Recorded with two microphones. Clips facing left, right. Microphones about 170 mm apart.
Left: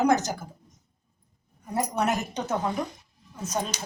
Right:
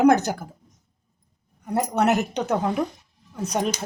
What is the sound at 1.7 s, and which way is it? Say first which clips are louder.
A woman's voice: right 5 dB; 65° right (ahead or behind).